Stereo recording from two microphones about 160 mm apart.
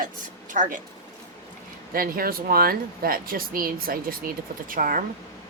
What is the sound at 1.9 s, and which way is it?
Speech, 65° right (ahead or behind).